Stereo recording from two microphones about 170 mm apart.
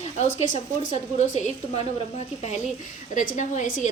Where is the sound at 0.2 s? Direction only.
45° left (ahead or behind).